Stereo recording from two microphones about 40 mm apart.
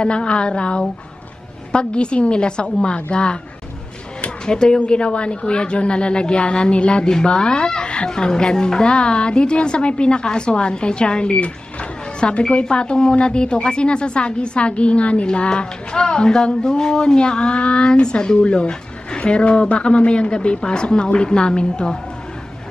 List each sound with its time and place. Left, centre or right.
0.0 s a woman's voice: left
4.5 s a woman's voice: left